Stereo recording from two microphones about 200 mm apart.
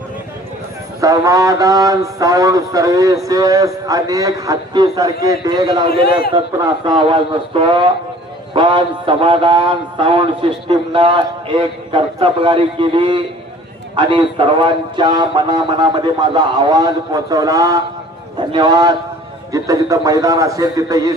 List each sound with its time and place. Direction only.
1.0 s a man's voice: 15° right (ahead or behind)
6.8 s mantra: 25° right (ahead or behind)
19.5 s a man's voice: 15° right (ahead or behind)